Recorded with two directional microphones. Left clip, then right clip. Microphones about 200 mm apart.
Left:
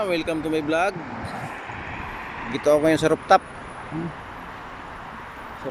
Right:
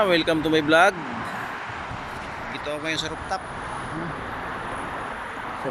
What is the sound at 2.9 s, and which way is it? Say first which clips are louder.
Speech: left 10 dB; 50° left (ahead or behind).